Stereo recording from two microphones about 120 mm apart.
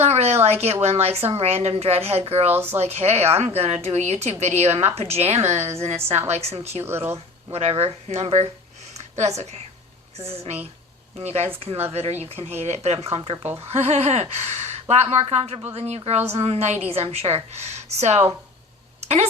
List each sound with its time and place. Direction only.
0.0 s a sound: 65° right (ahead or behind)
0.6 s a woman's voice: 60° right (ahead or behind)
6.8 s speech: 20° right (ahead or behind)
7.5 s a woman's voice: 60° right (ahead or behind)
10.2 s a woman's voice: 55° right (ahead or behind)
11.6 s a woman's voice: 55° right (ahead or behind)